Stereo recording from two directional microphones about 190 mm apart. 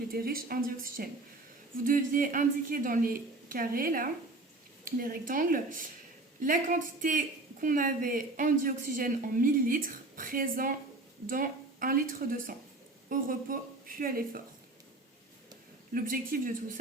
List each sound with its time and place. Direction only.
0.1 s a woman's voice: 50° right (ahead or behind)
16.0 s a woman's voice: 50° right (ahead or behind)